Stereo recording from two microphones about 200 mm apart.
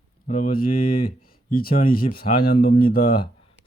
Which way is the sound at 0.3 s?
45° left (ahead or behind).